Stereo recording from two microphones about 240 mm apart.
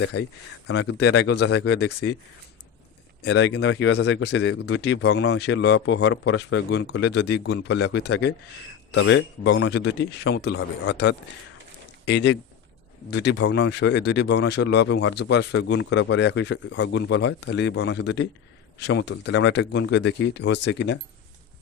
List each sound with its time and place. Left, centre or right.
0.0 s speech: left
3.2 s speech: left